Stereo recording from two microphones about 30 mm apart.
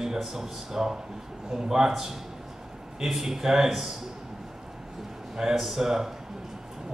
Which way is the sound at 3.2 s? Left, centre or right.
Centre.